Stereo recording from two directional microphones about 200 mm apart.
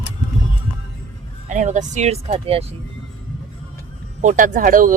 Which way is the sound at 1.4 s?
40° right (ahead or behind).